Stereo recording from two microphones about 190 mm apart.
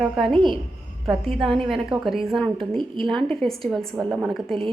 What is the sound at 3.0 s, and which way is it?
A woman's voice, centre (ahead or behind).